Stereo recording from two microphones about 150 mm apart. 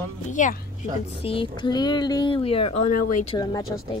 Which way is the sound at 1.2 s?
35° left (ahead or behind).